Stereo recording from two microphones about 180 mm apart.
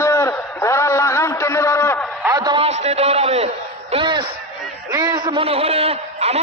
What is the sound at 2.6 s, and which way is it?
A man's voice, 35° right (ahead or behind).